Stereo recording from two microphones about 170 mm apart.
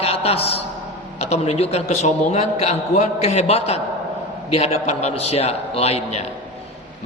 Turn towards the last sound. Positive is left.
turn(degrees=35)  # may be behind; listen again after turning